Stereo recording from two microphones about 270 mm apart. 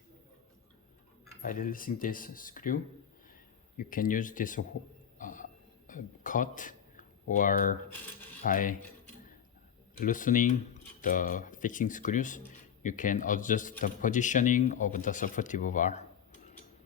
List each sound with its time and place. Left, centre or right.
1.4 s a man's voice: left
5.2 s a sound: left
5.9 s a man's voice: left
10.0 s a man's voice: left